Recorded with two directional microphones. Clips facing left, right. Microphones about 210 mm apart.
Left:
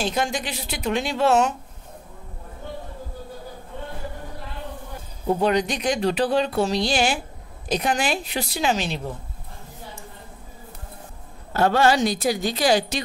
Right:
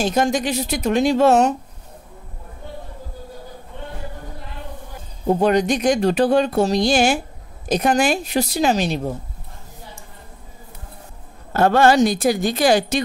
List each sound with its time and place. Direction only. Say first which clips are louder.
0.0 s a woman's voice: right 6 dB; 45° right (ahead or behind)
5.2 s a woman's voice: right 4 dB; 45° right (ahead or behind)
11.5 s a woman's voice: right 4 dB; 50° right (ahead or behind)